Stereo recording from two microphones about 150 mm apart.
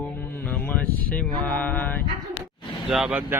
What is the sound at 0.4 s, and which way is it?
Mantra, 10° left (ahead or behind).